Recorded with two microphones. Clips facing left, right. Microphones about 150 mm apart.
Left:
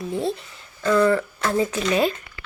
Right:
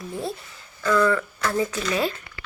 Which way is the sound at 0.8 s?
30° left (ahead or behind).